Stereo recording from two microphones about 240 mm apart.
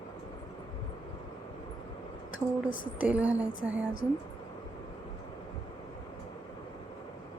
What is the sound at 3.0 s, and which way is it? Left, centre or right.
Speech, centre.